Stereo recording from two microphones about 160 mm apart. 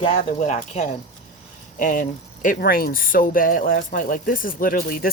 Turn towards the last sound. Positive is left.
turn(degrees=65)  # may be behind; listen again after turning